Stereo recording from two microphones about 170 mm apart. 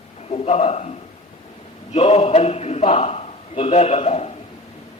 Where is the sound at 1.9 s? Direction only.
40° left (ahead or behind).